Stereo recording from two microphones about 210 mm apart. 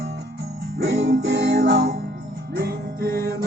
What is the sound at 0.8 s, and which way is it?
Music, 50° right (ahead or behind).